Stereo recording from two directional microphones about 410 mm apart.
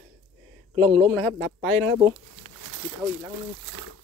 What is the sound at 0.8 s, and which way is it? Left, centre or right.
Speech, centre.